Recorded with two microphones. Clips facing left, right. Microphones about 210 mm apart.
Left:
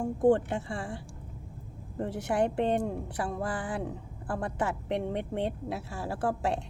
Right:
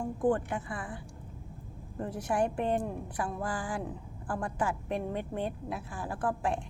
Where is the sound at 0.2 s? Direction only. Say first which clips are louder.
Left 5 dB; 25° left (ahead or behind).